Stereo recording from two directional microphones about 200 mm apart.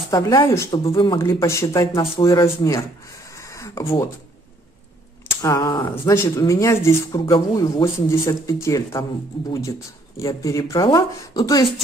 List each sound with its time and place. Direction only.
0.1 s speech: 20° left (ahead or behind)
3.3 s a sound: 15° left (ahead or behind)
5.3 s speech: 15° left (ahead or behind)
7.2 s speech: 25° left (ahead or behind)